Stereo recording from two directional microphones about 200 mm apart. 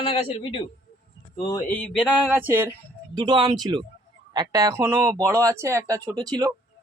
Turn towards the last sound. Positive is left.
turn(degrees=-20)  # may be behind; listen again after turning